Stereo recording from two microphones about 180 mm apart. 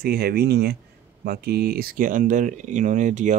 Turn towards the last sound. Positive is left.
turn(degrees=-45)  # may be behind; listen again after turning